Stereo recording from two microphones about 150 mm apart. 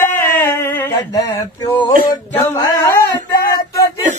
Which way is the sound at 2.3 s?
10° left (ahead or behind).